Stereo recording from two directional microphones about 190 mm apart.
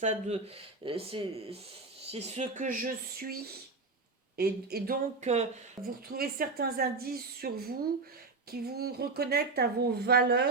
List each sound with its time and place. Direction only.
0.0 s speech: 35° right (ahead or behind)
4.4 s a woman's voice: 55° right (ahead or behind)
5.2 s speech: 35° right (ahead or behind)
5.8 s a woman's voice: 50° right (ahead or behind)